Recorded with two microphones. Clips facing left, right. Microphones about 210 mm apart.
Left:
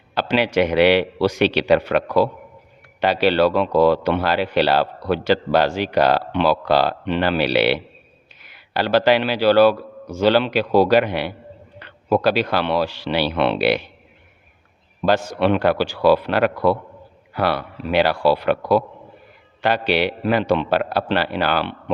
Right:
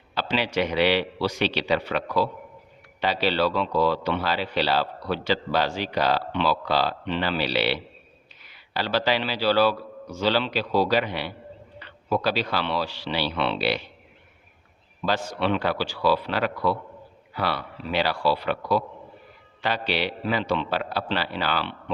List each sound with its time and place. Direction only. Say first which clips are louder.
0.1 s a man's voice: left 7 dB; 60° left (ahead or behind)
15.2 s speech: left 7 dB; 50° left (ahead or behind)